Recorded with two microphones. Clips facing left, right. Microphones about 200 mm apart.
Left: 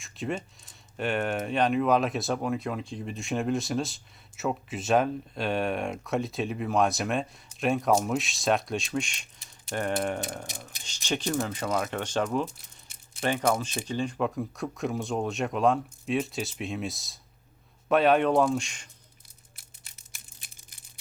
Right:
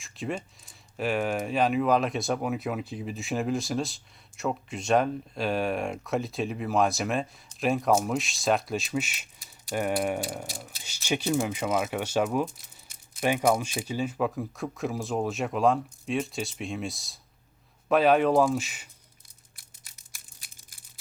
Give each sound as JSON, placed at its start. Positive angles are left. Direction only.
{"t": 0.0, "sound": "speech", "side_deg": 0}
{"t": 10.5, "sound": "speech", "side_deg": 20}
{"t": 10.8, "sound": "speech", "side_deg": -10}
{"t": 19.5, "sound": "a sound", "side_deg": 25}